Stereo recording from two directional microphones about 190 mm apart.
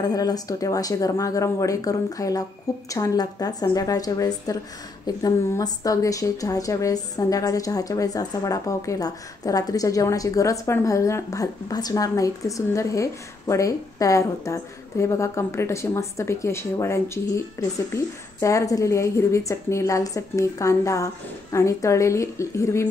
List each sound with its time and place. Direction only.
0.0 s speech: 20° left (ahead or behind)